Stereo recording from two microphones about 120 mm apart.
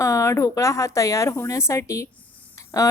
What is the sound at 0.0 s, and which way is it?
Speech, 25° left (ahead or behind).